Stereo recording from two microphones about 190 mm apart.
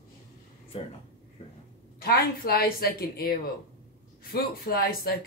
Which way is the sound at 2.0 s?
55° left (ahead or behind).